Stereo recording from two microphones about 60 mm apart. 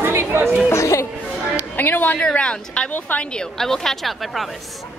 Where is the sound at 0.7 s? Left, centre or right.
Left.